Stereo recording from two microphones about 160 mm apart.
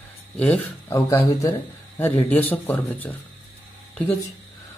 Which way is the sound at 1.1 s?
20° left (ahead or behind).